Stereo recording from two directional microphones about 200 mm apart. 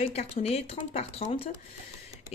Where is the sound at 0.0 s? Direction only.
30° left (ahead or behind).